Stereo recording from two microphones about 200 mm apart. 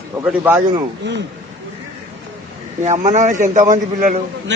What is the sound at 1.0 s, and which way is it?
Speech, 65° right (ahead or behind).